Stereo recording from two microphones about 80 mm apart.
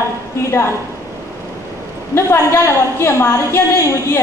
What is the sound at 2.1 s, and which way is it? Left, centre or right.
A woman's voice, left.